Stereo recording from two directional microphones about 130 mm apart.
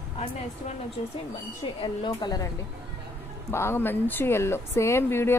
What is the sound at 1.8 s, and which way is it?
Speech, 40° left (ahead or behind).